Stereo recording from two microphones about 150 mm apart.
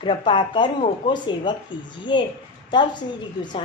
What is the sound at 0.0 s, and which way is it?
Speech, 35° left (ahead or behind).